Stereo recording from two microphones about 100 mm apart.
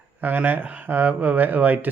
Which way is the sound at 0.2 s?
15° right (ahead or behind).